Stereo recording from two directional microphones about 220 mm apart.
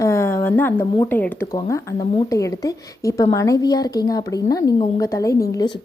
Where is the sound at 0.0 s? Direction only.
10° left (ahead or behind).